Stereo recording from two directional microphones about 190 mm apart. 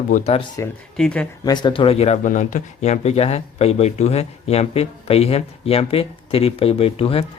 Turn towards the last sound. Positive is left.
turn(degrees=30)  # may be behind; listen again after turning